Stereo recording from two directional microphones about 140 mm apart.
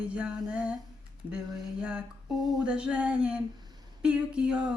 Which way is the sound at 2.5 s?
5° right (ahead or behind).